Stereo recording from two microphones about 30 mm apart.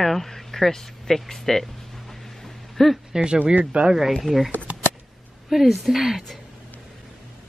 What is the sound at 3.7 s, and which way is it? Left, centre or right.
Speech, right.